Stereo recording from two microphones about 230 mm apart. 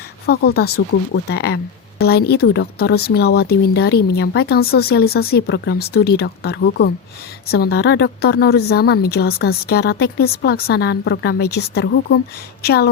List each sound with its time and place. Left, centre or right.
0.3 s speech: left